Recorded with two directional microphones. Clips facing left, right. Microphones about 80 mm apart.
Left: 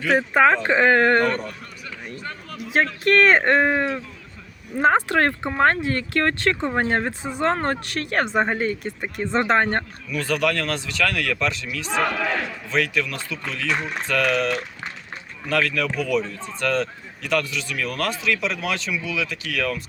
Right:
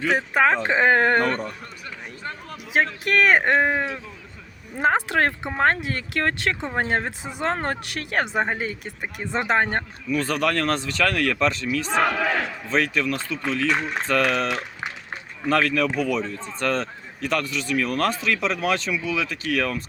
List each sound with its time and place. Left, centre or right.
0.3 s speech: centre
1.3 s speech: right
2.6 s speech: centre
6.7 s speech: centre
7.3 s speech: centre
10.1 s speech: right
11.9 s speech: centre
12.7 s speech: right
15.4 s speech: right